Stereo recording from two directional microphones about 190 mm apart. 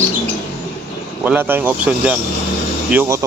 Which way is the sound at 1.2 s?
10° right (ahead or behind).